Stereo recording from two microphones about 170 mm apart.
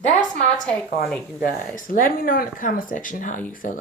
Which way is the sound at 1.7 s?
50° left (ahead or behind).